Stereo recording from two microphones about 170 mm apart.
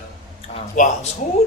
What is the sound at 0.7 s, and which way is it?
Speech, 45° left (ahead or behind).